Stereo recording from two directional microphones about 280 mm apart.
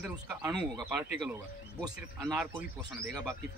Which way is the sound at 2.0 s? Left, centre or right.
Centre.